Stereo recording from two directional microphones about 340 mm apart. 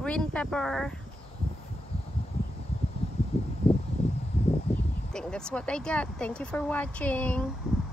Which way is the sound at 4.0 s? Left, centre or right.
Centre.